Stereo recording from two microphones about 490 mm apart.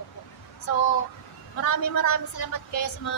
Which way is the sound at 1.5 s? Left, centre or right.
Left.